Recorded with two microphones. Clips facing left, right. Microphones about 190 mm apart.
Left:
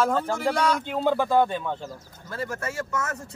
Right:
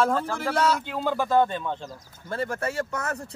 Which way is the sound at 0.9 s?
20° left (ahead or behind).